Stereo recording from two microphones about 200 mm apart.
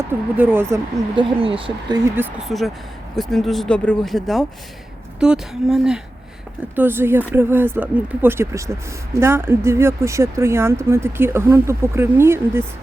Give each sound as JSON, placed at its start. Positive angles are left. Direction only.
{"t": 0.0, "sound": "speech", "side_deg": -10}
{"t": 1.1, "sound": "speech", "side_deg": -25}
{"t": 2.5, "sound": "speech", "side_deg": 0}